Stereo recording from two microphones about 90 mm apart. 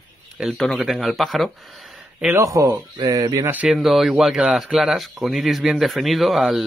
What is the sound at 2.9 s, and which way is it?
Speech, 45° right (ahead or behind).